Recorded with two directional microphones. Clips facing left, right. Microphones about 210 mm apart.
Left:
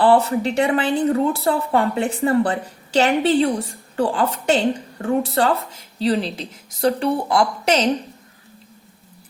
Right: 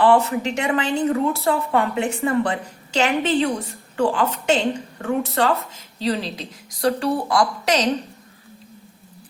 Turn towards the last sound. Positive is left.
turn(degrees=30)  # may be behind; listen again after turning